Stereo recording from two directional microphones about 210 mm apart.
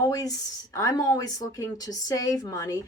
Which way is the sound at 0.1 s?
15° left (ahead or behind).